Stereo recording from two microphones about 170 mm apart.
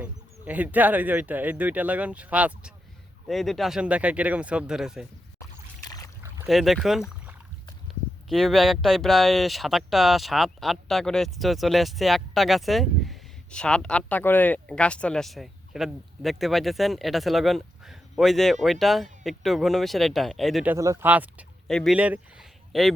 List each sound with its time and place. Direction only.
0.0 s speech: 10° right (ahead or behind)
5.4 s a sound: 20° left (ahead or behind)
6.5 s speech: centre (ahead or behind)
20.7 s speech: 20° right (ahead or behind)
21.7 s speech: 5° left (ahead or behind)
21.9 s speech: 10° right (ahead or behind)